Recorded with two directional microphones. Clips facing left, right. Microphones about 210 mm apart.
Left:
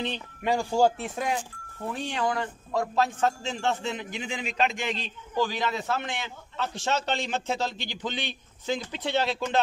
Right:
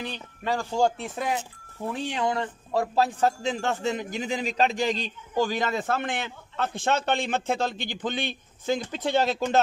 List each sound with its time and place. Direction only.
0.0 s speech: 20° left (ahead or behind); by 1.4 s 5° right (ahead or behind)
2.1 s a man's voice: 25° right (ahead or behind); by 9.6 s 45° right (ahead or behind)